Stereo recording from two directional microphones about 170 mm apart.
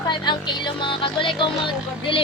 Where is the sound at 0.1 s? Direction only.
25° left (ahead or behind).